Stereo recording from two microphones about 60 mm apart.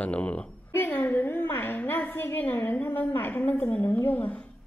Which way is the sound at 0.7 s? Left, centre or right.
Left.